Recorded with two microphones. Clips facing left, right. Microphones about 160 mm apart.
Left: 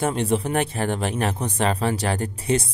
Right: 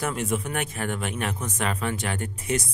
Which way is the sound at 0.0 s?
30° left (ahead or behind).